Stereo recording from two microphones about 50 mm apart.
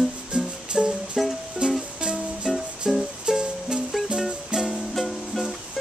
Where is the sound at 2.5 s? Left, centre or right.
Centre.